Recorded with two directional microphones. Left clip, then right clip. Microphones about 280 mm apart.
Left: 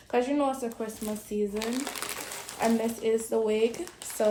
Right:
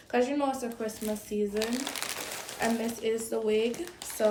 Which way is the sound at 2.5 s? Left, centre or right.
Centre.